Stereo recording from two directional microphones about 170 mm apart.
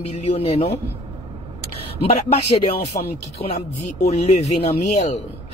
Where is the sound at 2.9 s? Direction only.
50° left (ahead or behind).